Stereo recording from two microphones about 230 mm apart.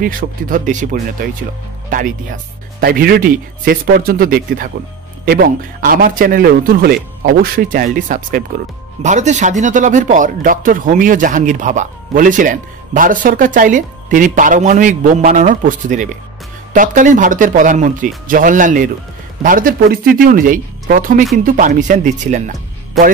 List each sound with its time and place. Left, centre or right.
0.0 s a man's voice: right
2.8 s a man's voice: right